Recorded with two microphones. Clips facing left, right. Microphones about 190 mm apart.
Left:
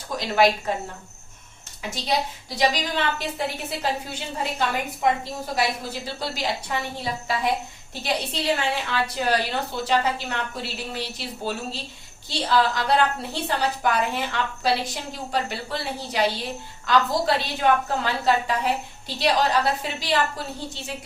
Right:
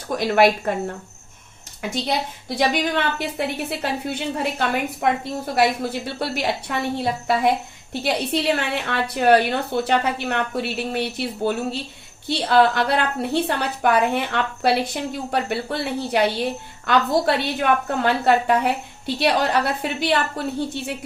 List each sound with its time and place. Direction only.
0.2 s a woman's voice: 60° right (ahead or behind)
2.6 s a woman's voice: 60° right (ahead or behind)